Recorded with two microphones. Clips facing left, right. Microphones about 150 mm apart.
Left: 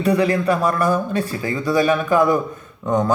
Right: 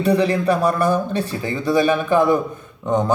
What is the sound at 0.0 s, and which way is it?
Speech, 30° right (ahead or behind).